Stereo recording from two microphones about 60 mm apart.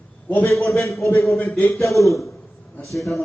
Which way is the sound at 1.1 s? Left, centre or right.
Left.